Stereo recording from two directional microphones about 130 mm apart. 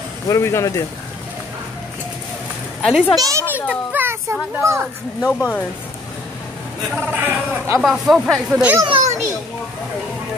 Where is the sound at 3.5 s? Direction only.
15° right (ahead or behind).